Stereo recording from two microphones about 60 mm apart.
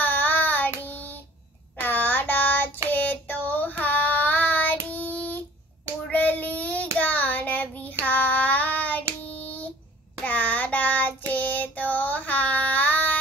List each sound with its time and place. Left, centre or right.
0.0 s child singing: left